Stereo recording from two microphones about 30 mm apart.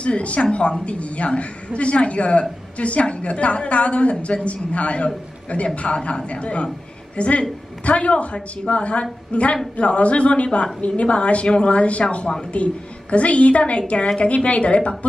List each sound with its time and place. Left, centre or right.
0.0 s a woman's voice: left